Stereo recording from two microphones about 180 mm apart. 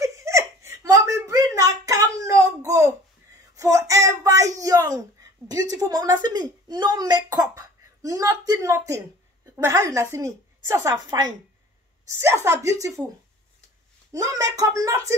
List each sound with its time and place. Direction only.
0.0 s a sound: 15° right (ahead or behind)
5.5 s a woman's voice: 20° right (ahead or behind)
14.1 s a woman's voice: 20° right (ahead or behind)